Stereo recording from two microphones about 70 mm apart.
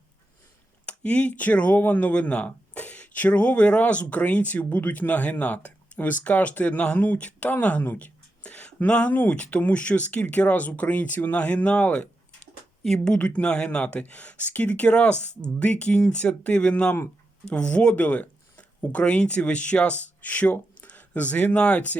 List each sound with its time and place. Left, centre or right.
0.9 s speech: centre